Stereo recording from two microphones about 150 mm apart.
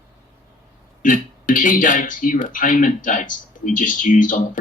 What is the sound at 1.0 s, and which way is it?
Speech, 60° left (ahead or behind).